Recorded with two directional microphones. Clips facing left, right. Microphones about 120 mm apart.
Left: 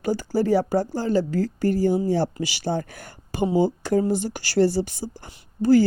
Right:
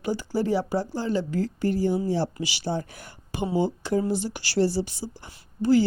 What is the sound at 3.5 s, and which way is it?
A woman's voice, 45° left (ahead or behind).